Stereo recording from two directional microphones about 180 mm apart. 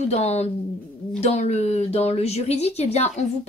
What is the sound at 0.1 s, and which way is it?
Speech, 35° left (ahead or behind).